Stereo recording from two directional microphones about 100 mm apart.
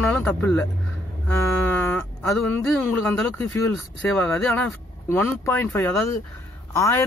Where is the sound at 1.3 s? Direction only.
25° left (ahead or behind).